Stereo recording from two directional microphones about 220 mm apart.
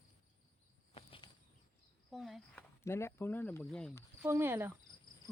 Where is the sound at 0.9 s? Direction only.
25° left (ahead or behind).